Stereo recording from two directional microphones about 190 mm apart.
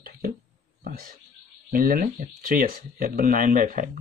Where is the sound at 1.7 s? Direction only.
50° right (ahead or behind).